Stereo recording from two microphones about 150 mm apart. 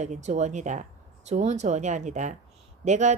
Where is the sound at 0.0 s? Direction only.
50° right (ahead or behind).